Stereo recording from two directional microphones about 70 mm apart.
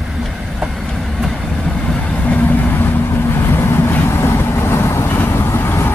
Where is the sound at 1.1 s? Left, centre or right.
Centre.